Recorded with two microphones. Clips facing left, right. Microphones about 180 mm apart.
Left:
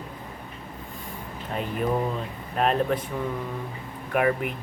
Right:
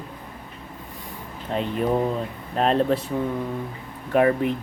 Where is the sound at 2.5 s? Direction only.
30° right (ahead or behind).